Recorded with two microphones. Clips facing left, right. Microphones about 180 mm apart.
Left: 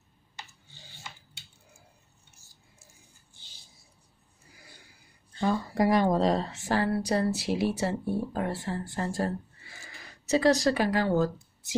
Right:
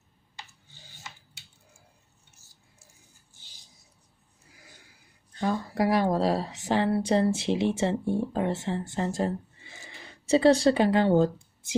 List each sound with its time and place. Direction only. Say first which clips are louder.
5.4 s a woman's voice: left 1 dB; centre (ahead or behind); by 11.3 s 25° right (ahead or behind)